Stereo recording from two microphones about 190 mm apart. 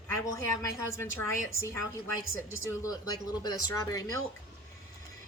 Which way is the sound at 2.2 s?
90° left.